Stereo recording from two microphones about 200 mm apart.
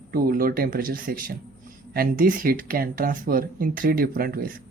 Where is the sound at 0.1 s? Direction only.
45° right (ahead or behind).